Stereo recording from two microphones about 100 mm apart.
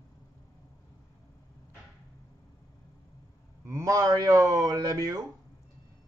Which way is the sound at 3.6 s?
30° right (ahead or behind).